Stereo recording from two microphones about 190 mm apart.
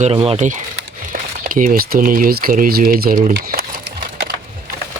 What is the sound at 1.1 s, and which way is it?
Speech, 45° right (ahead or behind).